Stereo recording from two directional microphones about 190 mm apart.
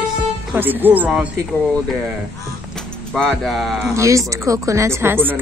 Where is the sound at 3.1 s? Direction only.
5° left (ahead or behind).